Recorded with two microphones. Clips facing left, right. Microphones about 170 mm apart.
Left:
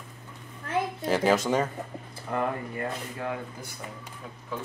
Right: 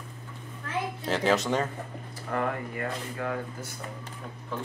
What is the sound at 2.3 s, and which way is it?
Speech, 20° left (ahead or behind).